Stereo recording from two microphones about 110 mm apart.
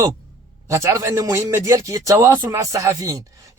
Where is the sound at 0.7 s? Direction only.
30° right (ahead or behind).